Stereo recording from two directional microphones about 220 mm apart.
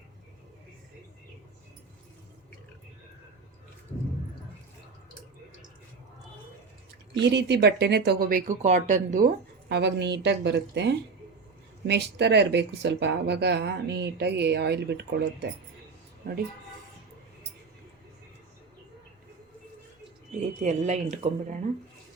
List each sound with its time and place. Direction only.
7.2 s speech: 50° right (ahead or behind)
20.4 s speech: 35° right (ahead or behind)